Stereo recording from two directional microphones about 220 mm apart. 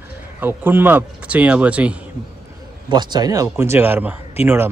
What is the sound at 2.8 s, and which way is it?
A man's voice, 20° right (ahead or behind).